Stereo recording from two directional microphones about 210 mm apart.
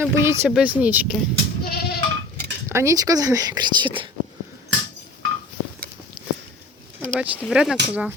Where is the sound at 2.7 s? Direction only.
15° right (ahead or behind).